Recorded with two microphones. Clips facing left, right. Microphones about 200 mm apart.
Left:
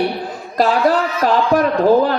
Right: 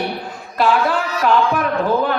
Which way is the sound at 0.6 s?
40° left (ahead or behind).